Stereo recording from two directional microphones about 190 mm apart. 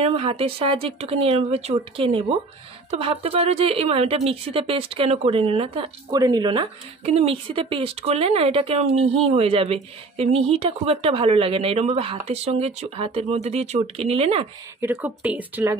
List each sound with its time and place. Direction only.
0.0 s speech: 30° right (ahead or behind)
14.8 s speech: 10° right (ahead or behind)